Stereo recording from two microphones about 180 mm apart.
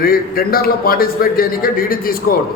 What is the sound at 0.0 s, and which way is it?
A man's voice, 55° left (ahead or behind).